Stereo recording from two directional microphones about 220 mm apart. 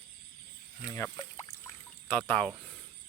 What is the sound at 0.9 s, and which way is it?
Pour, 15° left (ahead or behind).